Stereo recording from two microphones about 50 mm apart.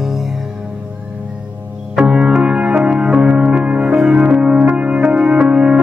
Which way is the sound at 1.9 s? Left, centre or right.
Centre.